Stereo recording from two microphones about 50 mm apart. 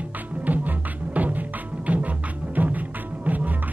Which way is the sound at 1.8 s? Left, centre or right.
Right.